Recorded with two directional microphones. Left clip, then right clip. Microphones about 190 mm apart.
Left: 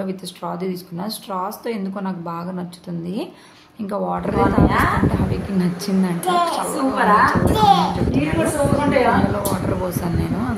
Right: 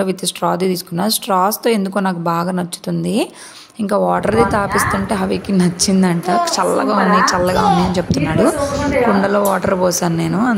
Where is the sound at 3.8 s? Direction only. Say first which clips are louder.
Right 8 dB; 35° right (ahead or behind).